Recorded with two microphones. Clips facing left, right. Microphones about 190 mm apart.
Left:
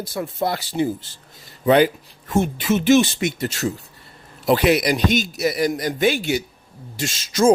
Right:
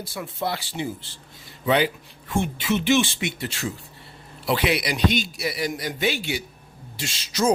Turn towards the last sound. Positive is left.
turn(degrees=50)  # may be behind; listen again after turning